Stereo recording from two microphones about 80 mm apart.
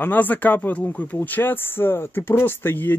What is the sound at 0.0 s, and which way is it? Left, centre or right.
Speech, left.